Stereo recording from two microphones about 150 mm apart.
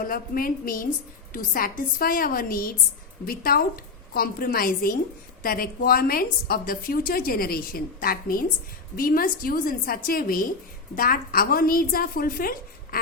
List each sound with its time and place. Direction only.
0.0 s a woman's voice: 70° left (ahead or behind)